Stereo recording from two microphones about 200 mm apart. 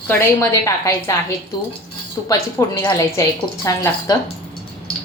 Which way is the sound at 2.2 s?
15° left (ahead or behind).